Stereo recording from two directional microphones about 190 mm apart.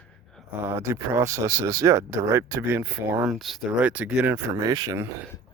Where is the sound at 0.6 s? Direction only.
15° right (ahead or behind).